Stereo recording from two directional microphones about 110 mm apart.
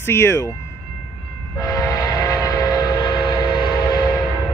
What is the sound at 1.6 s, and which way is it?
Train, 30° left (ahead or behind).